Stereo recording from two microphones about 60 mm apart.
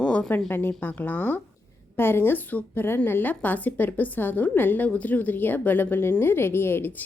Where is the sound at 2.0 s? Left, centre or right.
Left.